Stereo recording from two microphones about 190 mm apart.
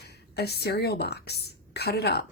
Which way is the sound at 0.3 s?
60° left (ahead or behind).